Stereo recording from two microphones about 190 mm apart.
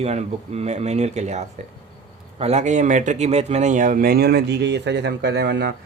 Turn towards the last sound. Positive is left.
turn(degrees=-65)  # may be behind; listen again after turning